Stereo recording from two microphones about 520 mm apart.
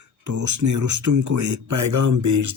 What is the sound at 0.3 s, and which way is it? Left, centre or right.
Speech, right.